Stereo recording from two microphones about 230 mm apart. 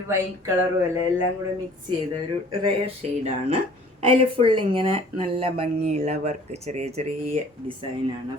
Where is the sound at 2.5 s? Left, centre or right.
Right.